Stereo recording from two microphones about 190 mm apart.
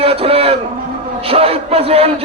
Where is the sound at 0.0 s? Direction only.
30° right (ahead or behind).